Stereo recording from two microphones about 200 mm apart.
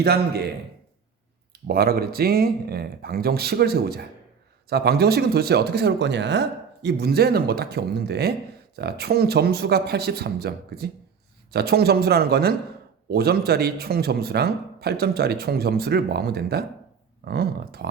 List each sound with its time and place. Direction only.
0.0 s a man's voice: 55° right (ahead or behind)
1.6 s a man's voice: 50° right (ahead or behind)